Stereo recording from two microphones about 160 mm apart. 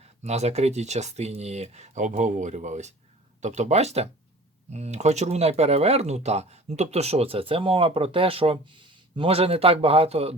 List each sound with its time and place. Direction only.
0.2 s speech: 45° right (ahead or behind)